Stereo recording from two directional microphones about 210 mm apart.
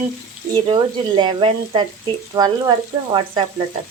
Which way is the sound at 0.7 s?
20° right (ahead or behind).